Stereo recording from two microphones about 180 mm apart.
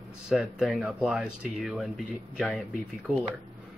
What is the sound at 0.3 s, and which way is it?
Speech, centre (ahead or behind).